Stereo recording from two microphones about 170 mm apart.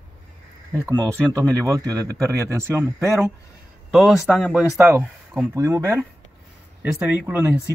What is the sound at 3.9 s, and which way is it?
Speech, centre (ahead or behind).